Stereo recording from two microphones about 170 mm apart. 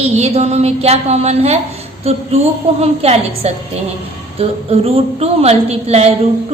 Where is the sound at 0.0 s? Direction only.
40° right (ahead or behind).